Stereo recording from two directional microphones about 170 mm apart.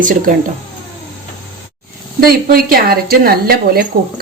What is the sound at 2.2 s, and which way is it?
A woman's voice, 60° right (ahead or behind).